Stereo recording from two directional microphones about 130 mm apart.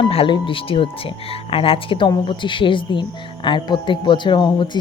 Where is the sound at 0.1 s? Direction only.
45° left (ahead or behind).